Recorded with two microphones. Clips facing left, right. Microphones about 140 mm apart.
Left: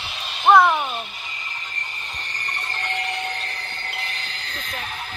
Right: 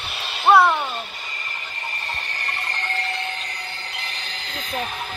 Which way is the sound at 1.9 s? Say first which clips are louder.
Right 4 dB; 75° right (ahead or behind).